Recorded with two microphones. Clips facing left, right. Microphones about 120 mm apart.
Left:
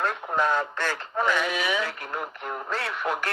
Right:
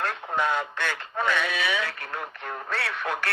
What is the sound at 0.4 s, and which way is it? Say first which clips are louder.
Speech: left 2 dB; 35° left (ahead or behind).